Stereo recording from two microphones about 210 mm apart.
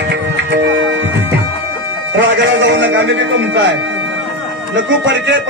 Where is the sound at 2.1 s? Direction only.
60° right (ahead or behind).